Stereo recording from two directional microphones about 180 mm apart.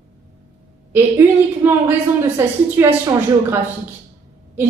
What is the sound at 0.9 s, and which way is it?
A woman's voice, 10° right (ahead or behind).